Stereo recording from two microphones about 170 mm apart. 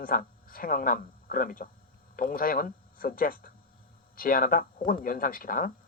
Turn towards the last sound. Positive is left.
turn(degrees=55)  # may be behind; listen again after turning